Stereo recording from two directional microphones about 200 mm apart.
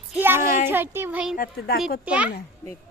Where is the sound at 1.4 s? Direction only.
50° left (ahead or behind).